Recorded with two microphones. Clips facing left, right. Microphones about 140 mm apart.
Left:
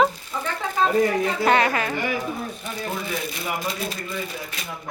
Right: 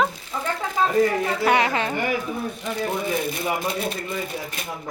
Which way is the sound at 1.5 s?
20° right (ahead or behind).